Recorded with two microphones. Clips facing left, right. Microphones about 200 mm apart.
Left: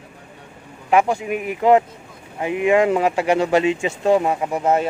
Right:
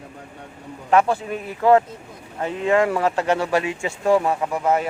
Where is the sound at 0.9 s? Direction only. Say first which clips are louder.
Left 1 dB; 15° left (ahead or behind).